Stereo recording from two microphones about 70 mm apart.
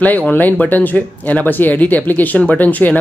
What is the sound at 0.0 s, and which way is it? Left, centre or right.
Speech, left.